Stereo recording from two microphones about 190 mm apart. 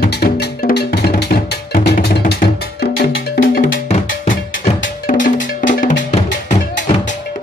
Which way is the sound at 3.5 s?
45° left (ahead or behind).